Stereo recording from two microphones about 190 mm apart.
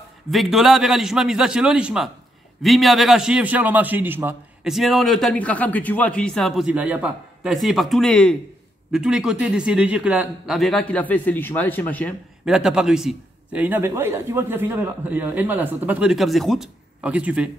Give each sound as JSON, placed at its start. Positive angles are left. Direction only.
{"t": 0.3, "sound": "a man's voice", "side_deg": 0}
{"t": 12.4, "sound": "a man's voice", "side_deg": -5}